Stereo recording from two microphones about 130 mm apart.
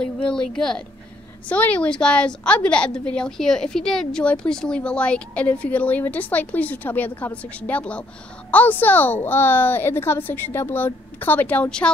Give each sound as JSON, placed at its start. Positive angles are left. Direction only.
{"t": 0.2, "sound": "a woman's voice", "side_deg": 5}